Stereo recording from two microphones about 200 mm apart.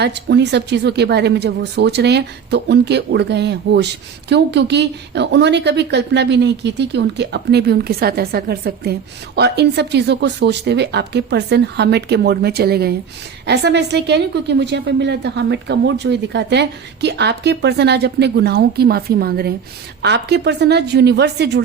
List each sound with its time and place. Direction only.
0.0 s a woman's voice: 60° right (ahead or behind)